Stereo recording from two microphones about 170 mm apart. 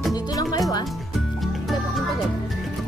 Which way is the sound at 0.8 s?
Centre (ahead or behind).